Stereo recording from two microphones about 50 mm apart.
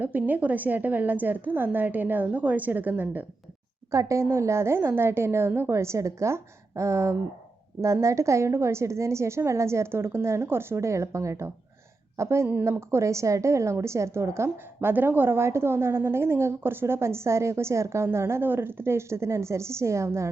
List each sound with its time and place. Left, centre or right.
0.0 s a woman's voice: right
3.9 s a woman's voice: right
5.7 s a woman's voice: right
15.4 s a woman's voice: right